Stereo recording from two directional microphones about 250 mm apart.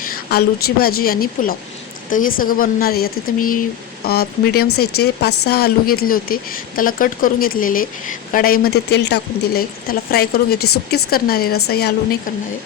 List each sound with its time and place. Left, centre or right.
0.0 s a woman's voice: left